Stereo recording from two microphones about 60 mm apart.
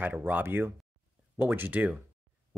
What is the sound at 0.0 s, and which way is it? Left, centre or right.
Speech, right.